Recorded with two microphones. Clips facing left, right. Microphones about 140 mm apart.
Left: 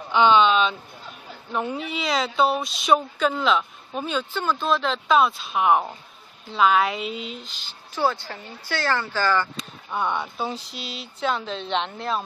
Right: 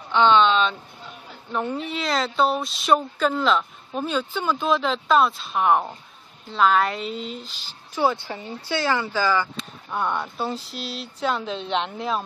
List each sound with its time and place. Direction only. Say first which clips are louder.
0.1 s speech: even; 5° left (ahead or behind)
8.0 s speech: right 2 dB; 15° right (ahead or behind); by 12.2 s centre (ahead or behind)